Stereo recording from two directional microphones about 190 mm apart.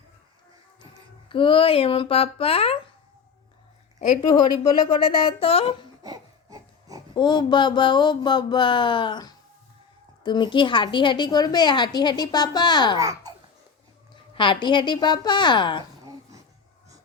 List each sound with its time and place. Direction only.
1.3 s a woman's voice: 25° left (ahead or behind)
4.3 s a woman's voice: 25° left (ahead or behind)
6.0 s a sound: 20° right (ahead or behind)
7.1 s a woman's voice: 25° left (ahead or behind)
13.0 s speech: 20° right (ahead or behind)
14.1 s a woman's voice: 25° left (ahead or behind)